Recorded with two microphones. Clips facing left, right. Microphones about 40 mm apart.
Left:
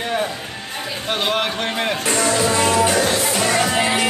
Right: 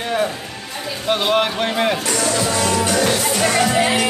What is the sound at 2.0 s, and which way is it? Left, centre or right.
Music, left.